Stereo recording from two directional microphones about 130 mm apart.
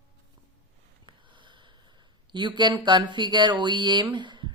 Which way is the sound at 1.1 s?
35° right (ahead or behind).